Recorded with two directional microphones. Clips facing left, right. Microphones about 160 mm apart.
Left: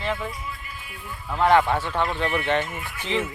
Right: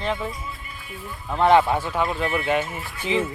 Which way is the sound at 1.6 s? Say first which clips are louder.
Right 1 dB; 10° right (ahead or behind).